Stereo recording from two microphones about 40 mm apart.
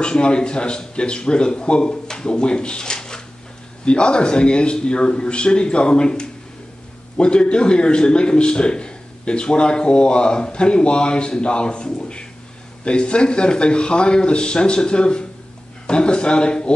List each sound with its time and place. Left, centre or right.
0.0 s a man's voice: left